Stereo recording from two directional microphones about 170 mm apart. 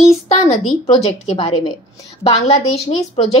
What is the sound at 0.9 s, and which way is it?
A woman's voice, 35° left (ahead or behind).